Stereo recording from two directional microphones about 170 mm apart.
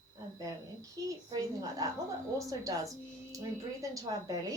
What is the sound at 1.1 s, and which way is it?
Speech, 20° right (ahead or behind).